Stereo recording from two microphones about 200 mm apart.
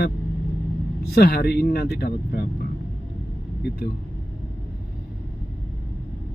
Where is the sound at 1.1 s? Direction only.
50° left (ahead or behind).